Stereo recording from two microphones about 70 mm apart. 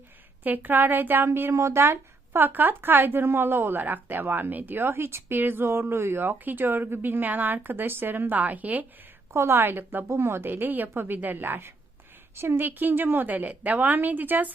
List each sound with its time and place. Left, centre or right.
0.4 s speech: right
9.3 s a woman's voice: right